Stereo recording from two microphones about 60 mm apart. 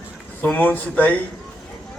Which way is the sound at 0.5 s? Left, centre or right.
Left.